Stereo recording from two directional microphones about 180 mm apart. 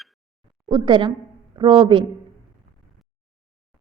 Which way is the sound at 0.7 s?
25° right (ahead or behind).